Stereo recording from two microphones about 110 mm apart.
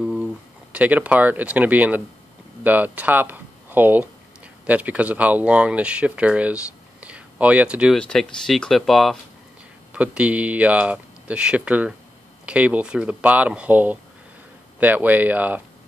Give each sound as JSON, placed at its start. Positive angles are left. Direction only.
{"t": 0.0, "sound": "a sound", "side_deg": -5}
{"t": 0.7, "sound": "speech", "side_deg": -15}
{"t": 7.9, "sound": "speech", "side_deg": 5}
{"t": 9.9, "sound": "speech", "side_deg": -10}